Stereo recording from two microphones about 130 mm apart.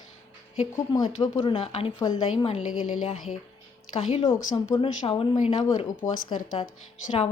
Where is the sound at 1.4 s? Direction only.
45° left (ahead or behind).